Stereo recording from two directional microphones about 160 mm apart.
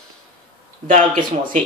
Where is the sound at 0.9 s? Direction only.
50° right (ahead or behind).